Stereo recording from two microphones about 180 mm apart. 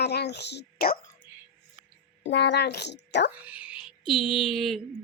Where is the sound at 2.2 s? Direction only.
75° left (ahead or behind).